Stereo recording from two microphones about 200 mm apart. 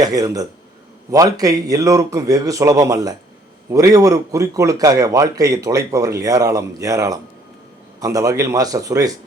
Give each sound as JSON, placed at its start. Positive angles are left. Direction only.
{"t": 0.0, "sound": "a man's voice", "side_deg": -20}